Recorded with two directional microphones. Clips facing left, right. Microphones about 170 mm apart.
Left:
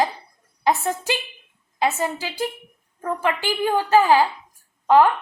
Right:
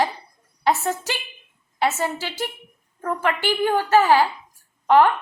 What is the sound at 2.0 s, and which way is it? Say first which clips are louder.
A woman's voice: left 1 dB; 15° left (ahead or behind).